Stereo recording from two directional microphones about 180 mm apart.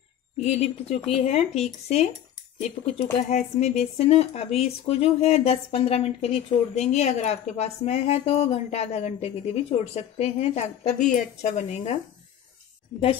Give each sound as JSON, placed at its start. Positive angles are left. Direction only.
{"t": 0.4, "sound": "speech", "side_deg": 35}